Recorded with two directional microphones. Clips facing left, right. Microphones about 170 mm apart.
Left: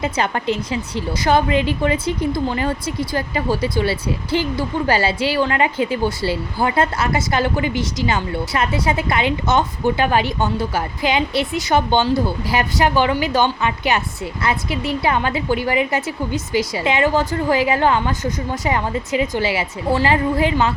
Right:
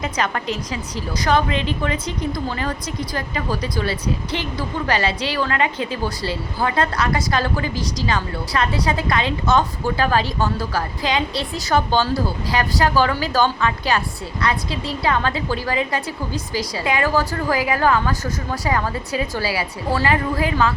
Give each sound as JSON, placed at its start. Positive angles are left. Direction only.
{"t": 0.0, "sound": "a woman's voice", "side_deg": 30}
{"t": 1.5, "sound": "a woman's voice", "side_deg": -30}
{"t": 1.8, "sound": "a woman's voice", "side_deg": 25}